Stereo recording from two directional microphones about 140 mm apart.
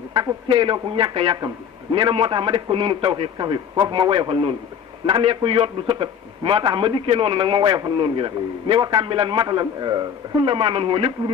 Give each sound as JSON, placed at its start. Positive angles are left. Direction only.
{"t": 0.1, "sound": "a man's voice", "side_deg": -30}